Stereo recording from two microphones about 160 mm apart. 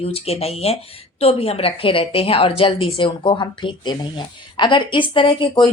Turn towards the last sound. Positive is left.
turn(degrees=30)  # may be behind; listen again after turning